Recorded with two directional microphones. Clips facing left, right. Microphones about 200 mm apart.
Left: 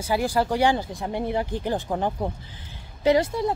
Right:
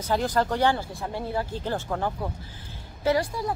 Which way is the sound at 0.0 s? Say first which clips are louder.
Left 1 dB; 10° left (ahead or behind).